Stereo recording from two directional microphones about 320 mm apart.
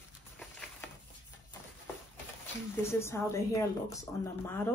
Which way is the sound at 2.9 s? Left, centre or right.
Centre.